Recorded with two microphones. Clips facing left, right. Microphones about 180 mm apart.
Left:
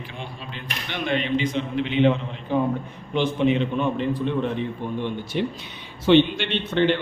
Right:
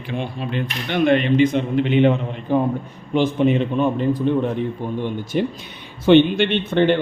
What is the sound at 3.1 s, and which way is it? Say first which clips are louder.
Speech: right 4 dB; 45° right (ahead or behind).